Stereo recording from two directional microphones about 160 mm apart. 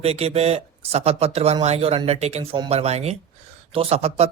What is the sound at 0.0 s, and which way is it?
Speech, 40° right (ahead or behind).